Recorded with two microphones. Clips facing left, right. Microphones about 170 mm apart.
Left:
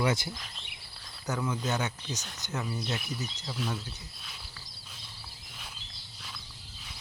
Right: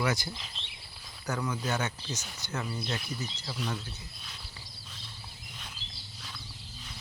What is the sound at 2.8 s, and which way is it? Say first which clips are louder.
Speech: left 1 dB; centre (ahead or behind).